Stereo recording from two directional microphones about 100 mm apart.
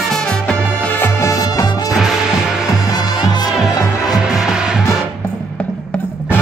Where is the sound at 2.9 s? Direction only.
45° left (ahead or behind).